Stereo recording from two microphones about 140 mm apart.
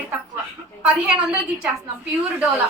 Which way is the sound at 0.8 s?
5° right (ahead or behind).